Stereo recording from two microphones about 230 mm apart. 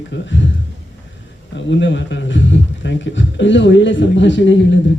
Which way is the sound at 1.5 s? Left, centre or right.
Left.